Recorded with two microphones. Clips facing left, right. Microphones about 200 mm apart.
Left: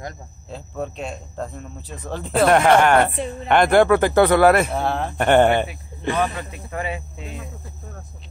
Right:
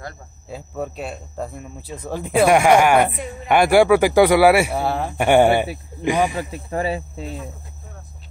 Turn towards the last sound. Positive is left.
turn(degrees=-35)  # may be behind; listen again after turning